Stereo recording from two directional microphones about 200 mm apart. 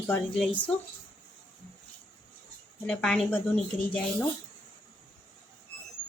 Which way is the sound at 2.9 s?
5° left (ahead or behind).